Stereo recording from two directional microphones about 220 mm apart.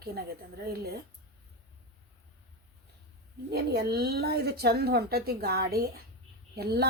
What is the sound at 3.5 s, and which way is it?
A woman's voice, 45° right (ahead or behind).